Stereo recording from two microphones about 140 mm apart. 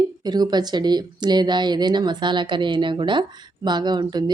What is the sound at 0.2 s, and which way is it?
A woman's voice, 30° right (ahead or behind).